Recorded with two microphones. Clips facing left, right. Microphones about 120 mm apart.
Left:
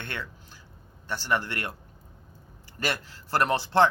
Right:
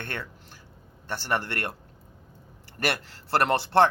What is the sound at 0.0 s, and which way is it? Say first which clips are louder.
Speech: right 1 dB; 50° right (ahead or behind).